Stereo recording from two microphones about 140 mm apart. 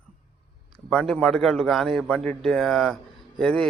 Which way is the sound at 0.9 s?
5° left (ahead or behind).